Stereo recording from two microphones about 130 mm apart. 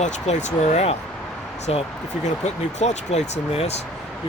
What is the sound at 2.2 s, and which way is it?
Speech, 60° left (ahead or behind).